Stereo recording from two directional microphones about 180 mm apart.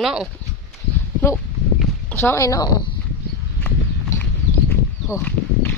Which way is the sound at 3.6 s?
10° left (ahead or behind).